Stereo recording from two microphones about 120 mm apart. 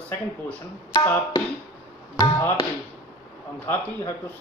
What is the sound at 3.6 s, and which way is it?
Speech, 20° left (ahead or behind).